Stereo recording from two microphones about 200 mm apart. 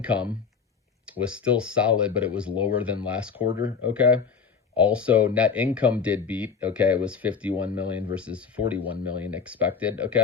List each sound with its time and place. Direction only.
0.0 s speech: 5° right (ahead or behind)